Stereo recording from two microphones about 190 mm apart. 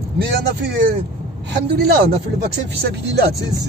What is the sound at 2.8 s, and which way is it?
Speech, 60° right (ahead or behind).